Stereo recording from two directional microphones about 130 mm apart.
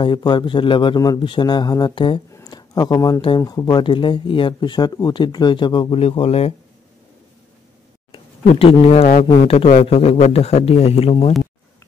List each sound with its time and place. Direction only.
0.0 s speech: 35° left (ahead or behind)
2.3 s a sound: 30° left (ahead or behind)
3.3 s speech: 30° left (ahead or behind); by 6.5 s 50° left (ahead or behind)
8.1 s a man's voice: 45° left (ahead or behind)